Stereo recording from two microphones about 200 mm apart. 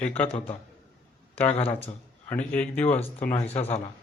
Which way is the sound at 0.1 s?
30° left (ahead or behind).